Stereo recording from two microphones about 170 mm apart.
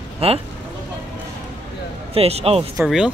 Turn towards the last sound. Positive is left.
turn(degrees=-5)  # may be behind; listen again after turning